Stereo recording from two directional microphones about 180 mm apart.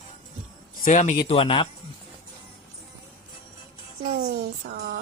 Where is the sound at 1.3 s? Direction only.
30° left (ahead or behind).